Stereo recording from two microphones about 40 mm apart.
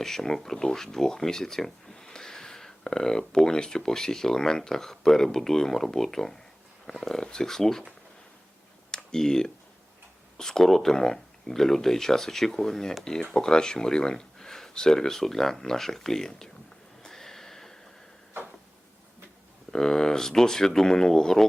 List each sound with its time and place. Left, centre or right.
0.0 s speech: centre
8.9 s a sound: centre
10.3 s speech: centre
17.0 s sniff: centre
19.7 s speech: centre